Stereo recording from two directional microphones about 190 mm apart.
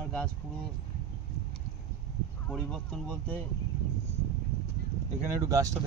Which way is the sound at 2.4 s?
5° left (ahead or behind).